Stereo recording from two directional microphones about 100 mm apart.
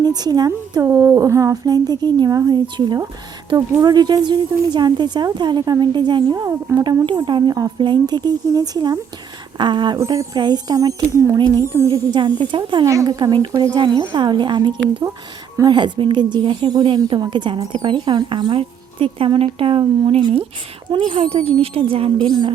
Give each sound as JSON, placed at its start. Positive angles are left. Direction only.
{"t": 0.0, "sound": "a woman's voice", "side_deg": -40}
{"t": 6.3, "sound": "a woman's voice", "side_deg": -35}
{"t": 6.8, "sound": "a woman's voice", "side_deg": -50}
{"t": 10.0, "sound": "a woman's voice", "side_deg": -35}
{"t": 10.3, "sound": "a woman's voice", "side_deg": -45}
{"t": 12.8, "sound": "a woman's voice", "side_deg": -30}
{"t": 20.9, "sound": "a woman's voice", "side_deg": -50}
{"t": 21.4, "sound": "speech", "side_deg": -75}
{"t": 22.3, "sound": "a woman's voice", "side_deg": -45}